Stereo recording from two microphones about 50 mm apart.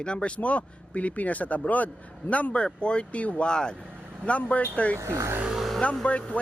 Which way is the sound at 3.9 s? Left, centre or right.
Right.